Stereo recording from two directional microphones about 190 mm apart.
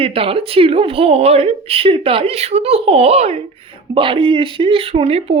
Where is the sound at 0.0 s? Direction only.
30° right (ahead or behind).